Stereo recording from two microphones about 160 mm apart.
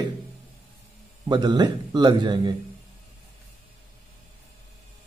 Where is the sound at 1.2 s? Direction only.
25° right (ahead or behind).